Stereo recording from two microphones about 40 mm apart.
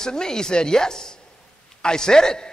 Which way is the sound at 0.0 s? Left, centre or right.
Centre.